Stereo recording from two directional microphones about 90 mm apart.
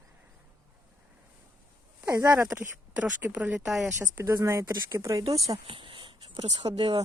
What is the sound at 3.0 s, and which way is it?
Speech, 15° right (ahead or behind).